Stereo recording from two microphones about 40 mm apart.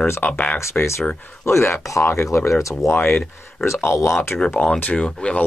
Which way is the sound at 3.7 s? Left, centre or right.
Left.